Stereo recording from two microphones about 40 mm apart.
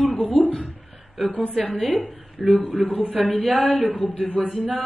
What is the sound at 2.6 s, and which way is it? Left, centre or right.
Speech, right.